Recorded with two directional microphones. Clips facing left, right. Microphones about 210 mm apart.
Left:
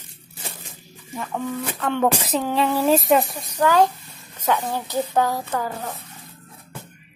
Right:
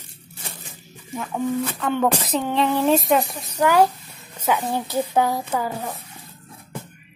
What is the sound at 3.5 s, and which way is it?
A woman's voice, 10° right (ahead or behind).